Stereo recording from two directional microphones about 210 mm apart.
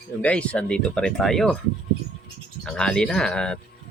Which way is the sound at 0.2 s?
5° left (ahead or behind).